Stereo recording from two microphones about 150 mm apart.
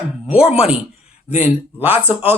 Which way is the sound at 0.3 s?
40° left (ahead or behind).